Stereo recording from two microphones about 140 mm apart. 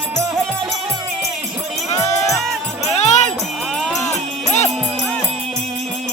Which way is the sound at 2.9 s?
55° left (ahead or behind).